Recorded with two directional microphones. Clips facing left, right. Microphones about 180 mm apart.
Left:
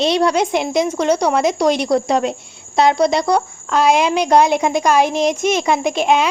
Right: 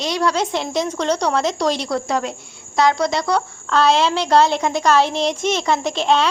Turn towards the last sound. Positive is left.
turn(degrees=10)  # may be behind; listen again after turning